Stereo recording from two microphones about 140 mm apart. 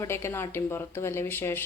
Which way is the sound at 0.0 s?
20° left (ahead or behind).